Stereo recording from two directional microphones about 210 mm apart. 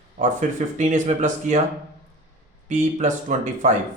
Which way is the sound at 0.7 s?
35° right (ahead or behind).